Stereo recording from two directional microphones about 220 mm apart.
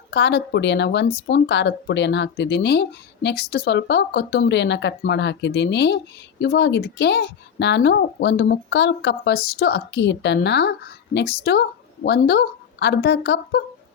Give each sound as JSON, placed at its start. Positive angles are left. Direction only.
{"t": 0.1, "sound": "a woman's voice", "side_deg": 50}